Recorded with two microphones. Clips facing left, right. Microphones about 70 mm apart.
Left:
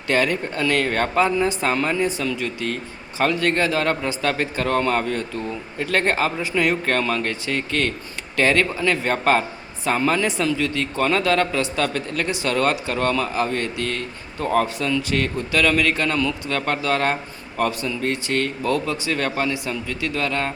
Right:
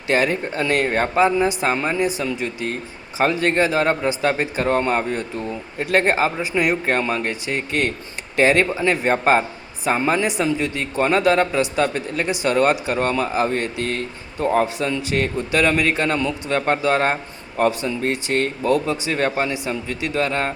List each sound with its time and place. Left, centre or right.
0.1 s a man's voice: right